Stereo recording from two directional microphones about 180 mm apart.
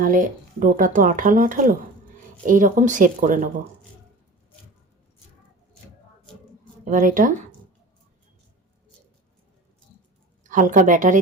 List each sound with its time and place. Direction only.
0.0 s speech: 50° right (ahead or behind)
6.9 s speech: 50° right (ahead or behind)
10.5 s speech: 45° right (ahead or behind)